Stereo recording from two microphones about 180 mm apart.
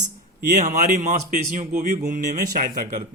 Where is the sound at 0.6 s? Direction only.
45° right (ahead or behind).